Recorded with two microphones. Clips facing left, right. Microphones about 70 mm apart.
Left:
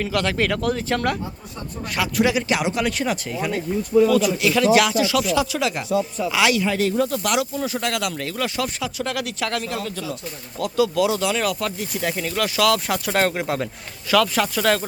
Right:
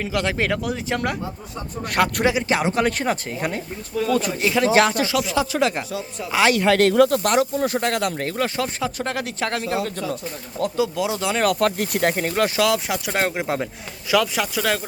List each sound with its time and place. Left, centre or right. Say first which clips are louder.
0.0 s speech: left 1 dB; centre
1.9 s speech: right 1 dB; right
2.2 s speech: right 1 dB; right
6.6 s speech: right 5 dB; right
7.2 s speech: right 3 dB; right
9.8 s speech: right 2 dB; right
10.6 s speech: left 2 dB; right
11.3 s speech: right 4 dB; right
12.6 s speech: left 1 dB; centre
14.4 s speech: left 3 dB; centre